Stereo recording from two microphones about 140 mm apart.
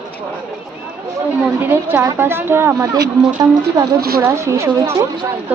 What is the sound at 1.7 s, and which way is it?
A woman's voice, 15° right (ahead or behind).